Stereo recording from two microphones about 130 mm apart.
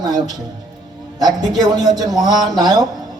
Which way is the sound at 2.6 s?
30° right (ahead or behind).